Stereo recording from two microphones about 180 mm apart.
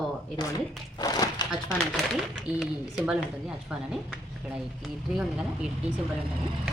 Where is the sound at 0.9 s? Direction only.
20° left (ahead or behind).